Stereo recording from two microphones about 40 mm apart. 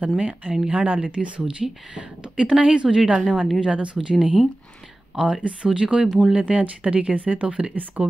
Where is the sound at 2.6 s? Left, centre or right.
Right.